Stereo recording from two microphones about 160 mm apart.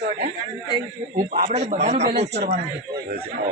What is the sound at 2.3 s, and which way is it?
Speech, 90° right.